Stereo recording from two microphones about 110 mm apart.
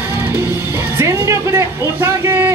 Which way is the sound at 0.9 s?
25° right (ahead or behind).